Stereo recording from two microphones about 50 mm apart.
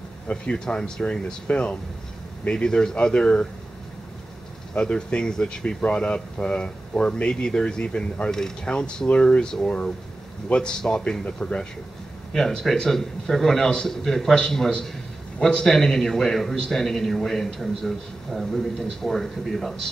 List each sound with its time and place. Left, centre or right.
0.3 s speech: centre
4.7 s speech: centre
12.3 s speech: centre
15.7 s speech: centre
16.5 s a man's voice: centre